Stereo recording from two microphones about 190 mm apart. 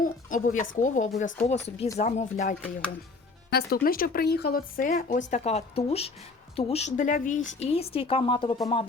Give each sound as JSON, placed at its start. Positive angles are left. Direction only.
{"t": 0.0, "sound": "a woman's voice", "side_deg": 45}
{"t": 2.6, "sound": "speech", "side_deg": 5}
{"t": 3.5, "sound": "a woman's voice", "side_deg": 50}